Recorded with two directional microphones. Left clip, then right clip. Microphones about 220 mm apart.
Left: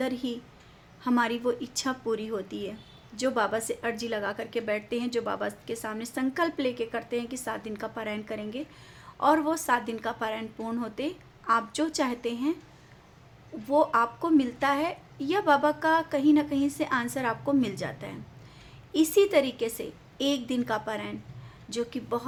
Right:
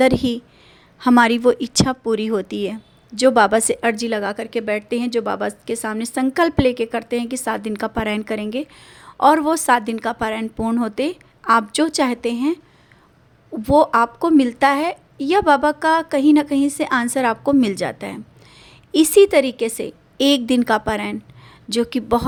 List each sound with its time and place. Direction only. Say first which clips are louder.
0.0 s a woman's voice: right 15 dB; 40° right (ahead or behind)
13.7 s a woman's voice: right 9 dB; 35° right (ahead or behind)